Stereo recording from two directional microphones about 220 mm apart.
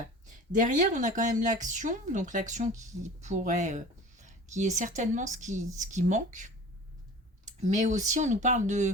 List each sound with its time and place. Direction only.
0.9 s speech: 35° right (ahead or behind)